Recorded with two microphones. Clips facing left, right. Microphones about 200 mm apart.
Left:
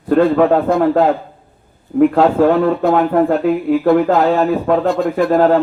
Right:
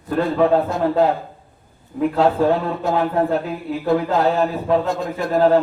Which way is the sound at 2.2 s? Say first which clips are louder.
Left 5 dB; 65° left (ahead or behind).